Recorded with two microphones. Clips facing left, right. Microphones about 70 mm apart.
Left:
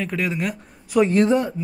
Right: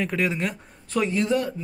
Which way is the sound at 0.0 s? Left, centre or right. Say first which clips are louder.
Left 1 dB; centre.